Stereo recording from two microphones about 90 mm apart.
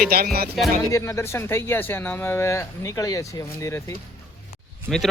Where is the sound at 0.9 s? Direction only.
35° left (ahead or behind).